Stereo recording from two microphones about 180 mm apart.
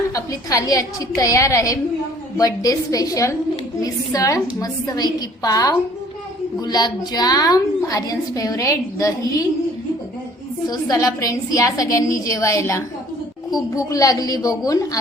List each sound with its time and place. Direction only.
0.1 s a woman's voice: 20° left (ahead or behind)
10.7 s a woman's voice: 20° left (ahead or behind)